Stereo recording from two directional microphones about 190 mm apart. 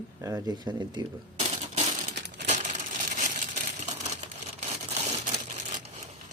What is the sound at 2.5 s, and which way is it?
Coin, 40° right (ahead or behind).